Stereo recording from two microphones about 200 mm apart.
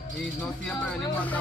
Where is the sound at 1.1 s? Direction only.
5° left (ahead or behind).